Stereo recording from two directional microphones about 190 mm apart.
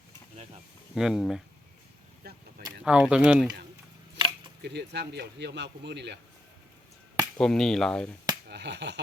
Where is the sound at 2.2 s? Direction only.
55° right (ahead or behind).